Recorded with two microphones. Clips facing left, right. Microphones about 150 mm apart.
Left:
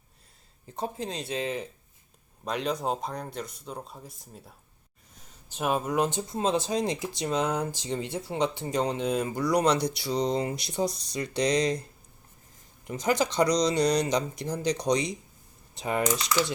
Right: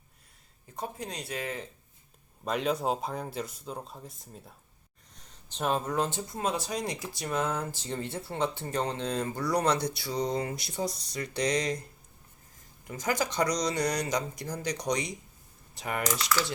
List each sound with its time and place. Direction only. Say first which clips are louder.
0.8 s speech: left 4 dB; 25° left (ahead or behind)
2.4 s speech: right 1 dB; centre (ahead or behind); by 11.9 s 20° left (ahead or behind)
12.9 s speech: left 4 dB; 20° left (ahead or behind)